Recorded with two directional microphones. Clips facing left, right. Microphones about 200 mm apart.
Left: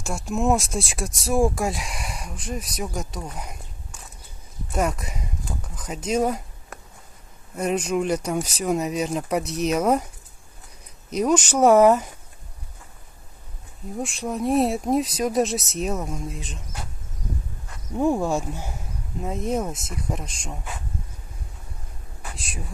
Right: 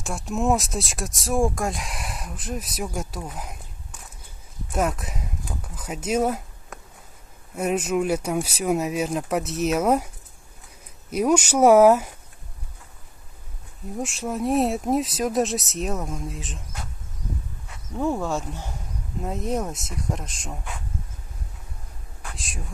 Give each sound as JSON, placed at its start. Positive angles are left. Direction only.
{"t": 0.0, "sound": "speech", "side_deg": 0}
{"t": 11.1, "sound": "speech", "side_deg": -10}
{"t": 13.9, "sound": "speech", "side_deg": -5}
{"t": 17.9, "sound": "speech", "side_deg": 15}
{"t": 22.2, "sound": "speech", "side_deg": 0}